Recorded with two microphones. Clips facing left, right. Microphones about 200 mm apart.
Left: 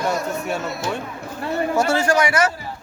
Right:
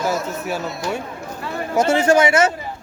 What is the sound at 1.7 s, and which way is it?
Speech, 20° right (ahead or behind).